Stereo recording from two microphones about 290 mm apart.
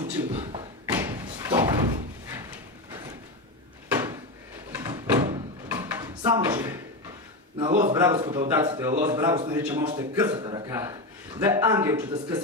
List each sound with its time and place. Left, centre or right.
0.3 s thump: centre
3.9 s a sound: centre
7.5 s a man's voice: centre